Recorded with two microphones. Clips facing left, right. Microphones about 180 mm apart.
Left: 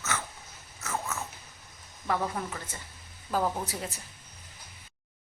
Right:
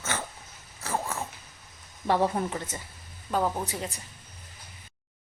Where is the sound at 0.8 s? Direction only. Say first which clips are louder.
Right 3 dB; 30° right (ahead or behind).